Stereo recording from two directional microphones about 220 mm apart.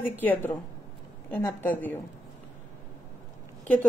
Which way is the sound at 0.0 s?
10° left (ahead or behind).